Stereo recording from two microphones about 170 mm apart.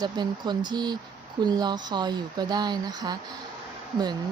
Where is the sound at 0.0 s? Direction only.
25° right (ahead or behind).